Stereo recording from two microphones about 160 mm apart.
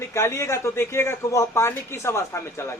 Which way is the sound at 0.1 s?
15° left (ahead or behind).